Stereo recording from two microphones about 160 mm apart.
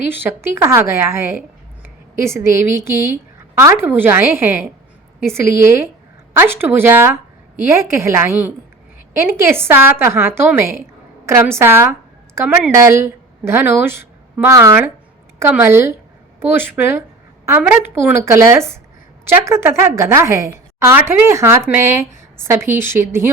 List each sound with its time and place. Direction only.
0.1 s a woman's voice: 10° right (ahead or behind)